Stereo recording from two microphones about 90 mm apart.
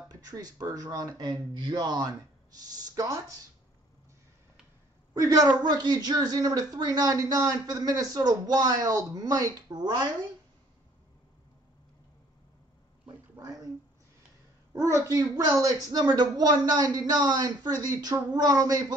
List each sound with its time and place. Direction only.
0.1 s a woman's voice: 45° right (ahead or behind)
5.1 s a woman's voice: 40° right (ahead or behind)
13.4 s a sound: 40° right (ahead or behind)
14.7 s a woman's voice: 35° right (ahead or behind)